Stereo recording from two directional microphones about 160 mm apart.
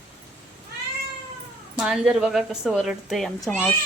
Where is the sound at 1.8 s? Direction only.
5° right (ahead or behind).